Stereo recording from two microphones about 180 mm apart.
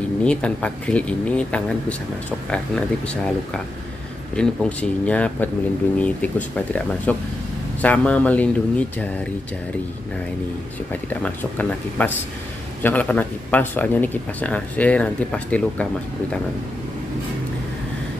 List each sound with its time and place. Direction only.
0.2 s speech: 5° left (ahead or behind)
10.9 s speech: 10° left (ahead or behind)